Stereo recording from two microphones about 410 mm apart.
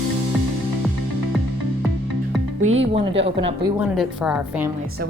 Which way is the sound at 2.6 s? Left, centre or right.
Right.